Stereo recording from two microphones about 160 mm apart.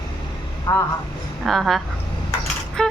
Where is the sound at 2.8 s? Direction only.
5° left (ahead or behind).